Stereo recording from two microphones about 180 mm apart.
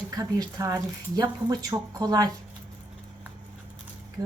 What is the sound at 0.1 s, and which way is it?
Speech, 20° right (ahead or behind).